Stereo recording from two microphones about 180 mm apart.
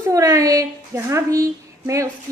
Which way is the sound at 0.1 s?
20° right (ahead or behind).